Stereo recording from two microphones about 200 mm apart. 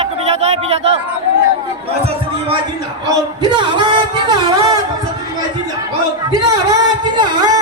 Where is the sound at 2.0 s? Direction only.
30° right (ahead or behind).